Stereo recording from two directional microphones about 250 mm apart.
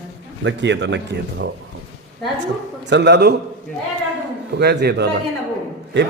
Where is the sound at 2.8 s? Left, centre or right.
Right.